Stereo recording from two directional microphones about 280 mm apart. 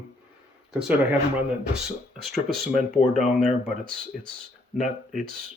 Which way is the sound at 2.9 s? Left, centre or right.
Left.